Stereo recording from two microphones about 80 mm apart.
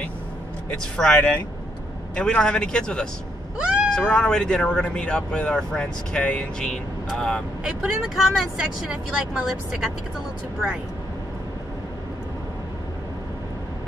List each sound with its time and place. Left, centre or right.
0.7 s speech: centre
7.6 s speech: centre